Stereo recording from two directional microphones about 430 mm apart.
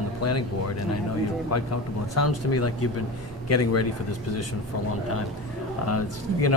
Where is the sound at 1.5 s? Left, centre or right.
Left.